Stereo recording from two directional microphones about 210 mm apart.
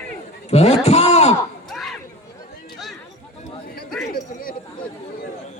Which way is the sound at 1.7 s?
Centre (ahead or behind).